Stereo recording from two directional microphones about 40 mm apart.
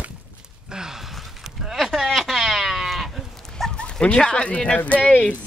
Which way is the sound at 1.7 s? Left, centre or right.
Centre.